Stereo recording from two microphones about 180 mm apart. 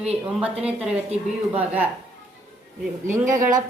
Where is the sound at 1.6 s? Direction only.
10° right (ahead or behind).